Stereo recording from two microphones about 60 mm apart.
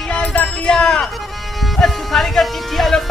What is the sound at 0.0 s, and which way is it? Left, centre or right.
Music, centre.